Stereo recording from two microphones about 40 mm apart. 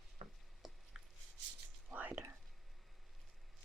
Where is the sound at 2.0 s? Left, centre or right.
Right.